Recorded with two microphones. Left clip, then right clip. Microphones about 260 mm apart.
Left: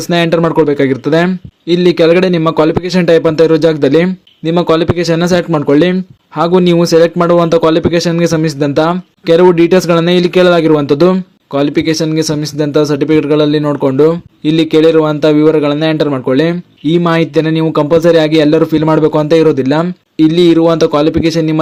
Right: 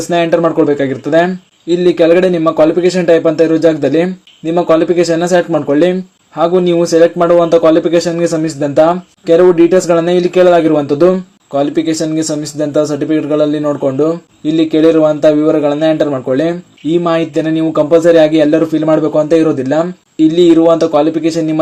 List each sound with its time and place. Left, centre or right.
0.1 s a man's voice: left